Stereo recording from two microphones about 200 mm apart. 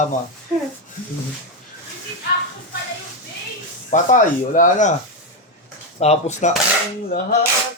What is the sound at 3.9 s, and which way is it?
A man's voice, 40° left (ahead or behind).